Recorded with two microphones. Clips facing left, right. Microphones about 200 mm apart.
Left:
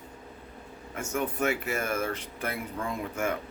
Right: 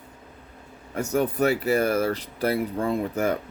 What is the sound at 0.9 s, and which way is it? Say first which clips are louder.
Speech: right 7 dB; 35° right (ahead or behind).